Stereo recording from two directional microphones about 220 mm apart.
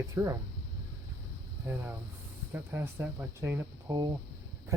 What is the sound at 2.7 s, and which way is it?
Speech, 10° right (ahead or behind).